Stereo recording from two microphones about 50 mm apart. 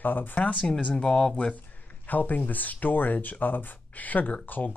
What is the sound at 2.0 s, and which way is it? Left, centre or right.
Speech, left.